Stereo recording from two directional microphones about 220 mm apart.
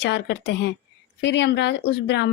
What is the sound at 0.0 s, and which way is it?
A woman's voice, 50° left (ahead or behind).